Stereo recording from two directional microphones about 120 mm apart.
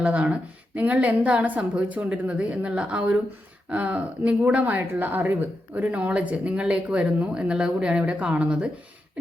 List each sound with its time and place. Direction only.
0.0 s speech: 10° right (ahead or behind)